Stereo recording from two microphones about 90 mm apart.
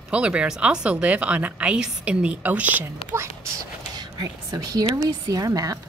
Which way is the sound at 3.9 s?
50° right (ahead or behind).